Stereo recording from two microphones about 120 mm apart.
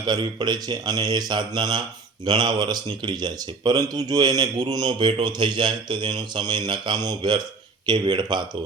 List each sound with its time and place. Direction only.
0.0 s speech: 35° right (ahead or behind)